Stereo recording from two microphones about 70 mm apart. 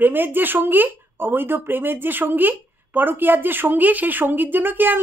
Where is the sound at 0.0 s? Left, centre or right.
Right.